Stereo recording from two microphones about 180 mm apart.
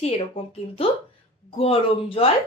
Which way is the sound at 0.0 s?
30° left (ahead or behind).